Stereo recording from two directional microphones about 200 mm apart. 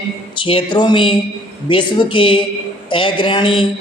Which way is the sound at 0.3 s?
25° left (ahead or behind).